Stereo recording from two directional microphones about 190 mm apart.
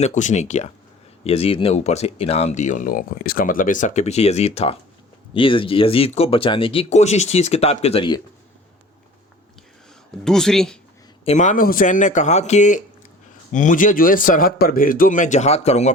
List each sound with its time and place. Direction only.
0.0 s speech: 40° left (ahead or behind)
10.2 s speech: centre (ahead or behind)
11.3 s a man's voice: 40° left (ahead or behind)